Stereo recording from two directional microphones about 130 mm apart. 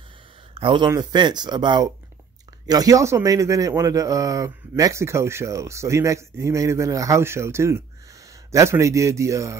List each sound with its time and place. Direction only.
0.6 s speech: 40° right (ahead or behind); by 9.6 s 25° right (ahead or behind)